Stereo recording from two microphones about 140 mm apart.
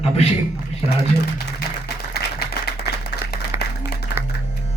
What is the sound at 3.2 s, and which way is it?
Applause, 15° right (ahead or behind).